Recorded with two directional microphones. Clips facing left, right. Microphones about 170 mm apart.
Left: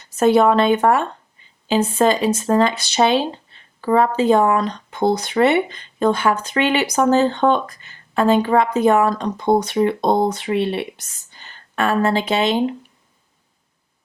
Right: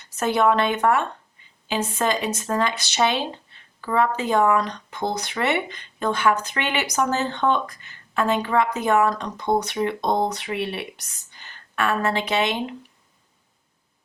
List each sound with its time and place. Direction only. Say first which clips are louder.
0.2 s speech: left 6 dB; 30° left (ahead or behind)